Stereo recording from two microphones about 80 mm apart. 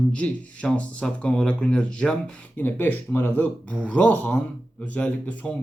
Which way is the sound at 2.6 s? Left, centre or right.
Left.